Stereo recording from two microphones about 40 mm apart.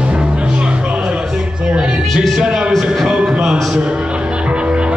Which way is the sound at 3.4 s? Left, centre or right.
Centre.